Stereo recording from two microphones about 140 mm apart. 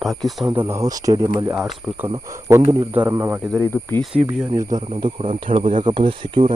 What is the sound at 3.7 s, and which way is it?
Speech, 15° left (ahead or behind).